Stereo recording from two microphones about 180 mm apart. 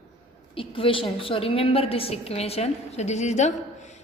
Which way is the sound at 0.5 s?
30° left (ahead or behind).